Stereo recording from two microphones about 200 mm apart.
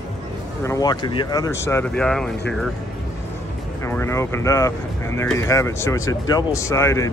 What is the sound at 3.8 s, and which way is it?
Speech, 15° left (ahead or behind).